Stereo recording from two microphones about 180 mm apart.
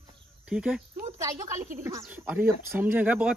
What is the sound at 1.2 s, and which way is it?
A woman's voice, 20° right (ahead or behind).